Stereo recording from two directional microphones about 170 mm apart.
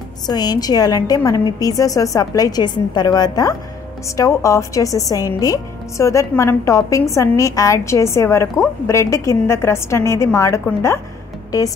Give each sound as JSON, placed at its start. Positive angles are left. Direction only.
{"t": 0.3, "sound": "a woman's voice", "side_deg": 25}